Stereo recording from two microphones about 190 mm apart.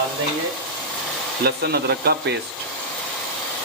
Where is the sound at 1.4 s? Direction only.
60° right (ahead or behind).